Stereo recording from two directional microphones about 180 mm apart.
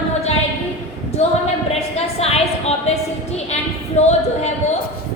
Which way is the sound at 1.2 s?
35° left (ahead or behind).